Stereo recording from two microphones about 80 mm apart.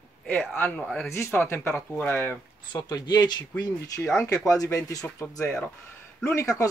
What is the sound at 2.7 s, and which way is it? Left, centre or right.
Speech, left.